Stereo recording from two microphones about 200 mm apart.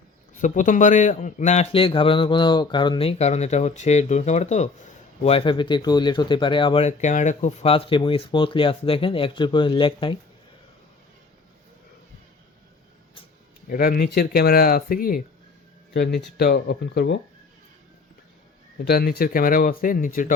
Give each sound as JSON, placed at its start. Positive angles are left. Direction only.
{"t": 0.3, "sound": "speech", "side_deg": 40}
{"t": 13.7, "sound": "speech", "side_deg": 45}
{"t": 16.4, "sound": "speech", "side_deg": 55}
{"t": 18.9, "sound": "speech", "side_deg": 50}